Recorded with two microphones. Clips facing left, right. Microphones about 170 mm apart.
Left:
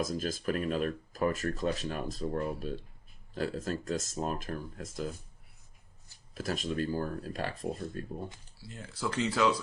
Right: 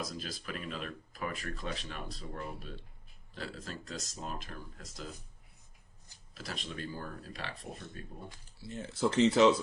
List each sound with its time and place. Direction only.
0.0 s speech: 45° left (ahead or behind)
6.3 s speech: 45° left (ahead or behind)
8.6 s speech: 25° right (ahead or behind)